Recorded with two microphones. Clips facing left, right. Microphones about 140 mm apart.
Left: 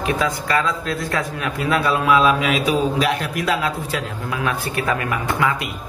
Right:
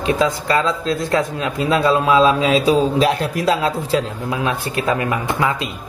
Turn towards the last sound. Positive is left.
turn(degrees=-25)  # may be behind; listen again after turning